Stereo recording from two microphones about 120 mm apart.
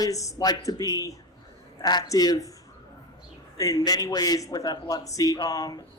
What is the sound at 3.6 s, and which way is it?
A man's voice, 30° left (ahead or behind).